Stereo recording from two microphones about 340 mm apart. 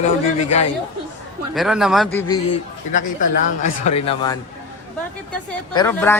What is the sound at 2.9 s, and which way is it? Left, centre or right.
Speech, left.